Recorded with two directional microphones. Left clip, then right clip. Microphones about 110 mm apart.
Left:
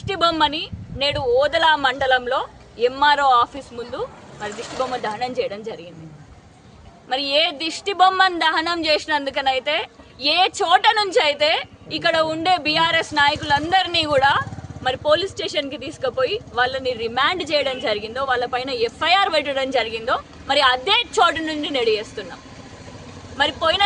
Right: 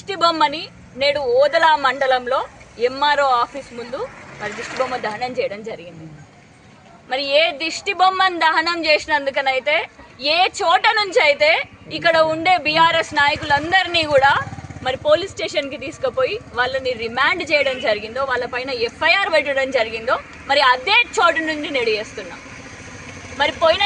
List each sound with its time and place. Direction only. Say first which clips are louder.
0.1 s speech: right 2 dB; 50° left (ahead or behind)
7.1 s a woman's voice: right 2 dB; 55° left (ahead or behind)
23.4 s speech: right 3 dB; 40° left (ahead or behind)